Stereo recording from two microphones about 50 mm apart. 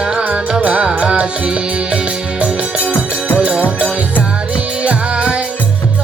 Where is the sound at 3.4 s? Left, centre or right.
Centre.